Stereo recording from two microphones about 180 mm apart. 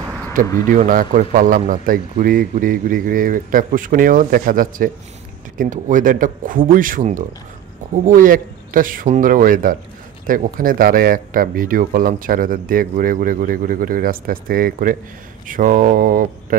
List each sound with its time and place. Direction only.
0.7 s speech: 50° right (ahead or behind)